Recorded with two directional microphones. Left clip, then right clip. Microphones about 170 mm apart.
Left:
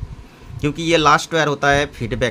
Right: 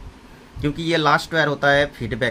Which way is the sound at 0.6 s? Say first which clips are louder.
Left 4 dB; 30° left (ahead or behind).